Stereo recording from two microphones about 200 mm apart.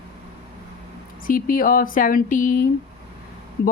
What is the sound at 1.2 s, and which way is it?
A woman's voice, 45° left (ahead or behind).